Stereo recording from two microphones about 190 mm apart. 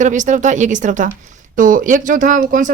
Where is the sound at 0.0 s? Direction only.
40° right (ahead or behind).